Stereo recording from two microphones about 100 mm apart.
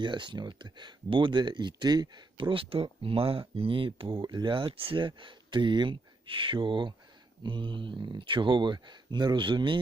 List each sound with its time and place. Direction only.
0.0 s speech: 50° right (ahead or behind)